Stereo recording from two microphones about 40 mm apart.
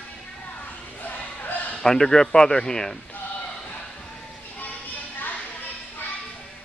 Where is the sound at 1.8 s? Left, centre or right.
Centre.